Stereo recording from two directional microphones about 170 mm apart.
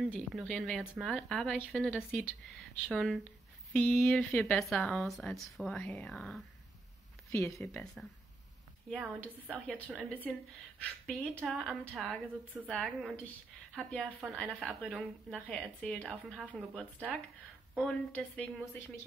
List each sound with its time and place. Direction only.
0.0 s a woman's voice: centre (ahead or behind)
7.2 s speech: 20° left (ahead or behind)
7.7 s a woman's voice: centre (ahead or behind)
8.9 s a woman's voice: 10° right (ahead or behind)
9.2 s a woman's voice: 5° left (ahead or behind)